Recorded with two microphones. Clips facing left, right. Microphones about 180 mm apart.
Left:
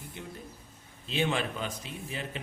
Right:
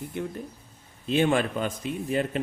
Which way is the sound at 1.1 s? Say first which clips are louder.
Right 7 dB; 50° right (ahead or behind).